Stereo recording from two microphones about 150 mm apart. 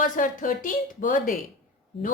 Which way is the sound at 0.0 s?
60° left (ahead or behind).